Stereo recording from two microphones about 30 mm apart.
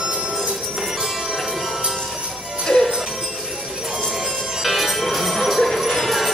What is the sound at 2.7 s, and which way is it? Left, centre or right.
Music, left.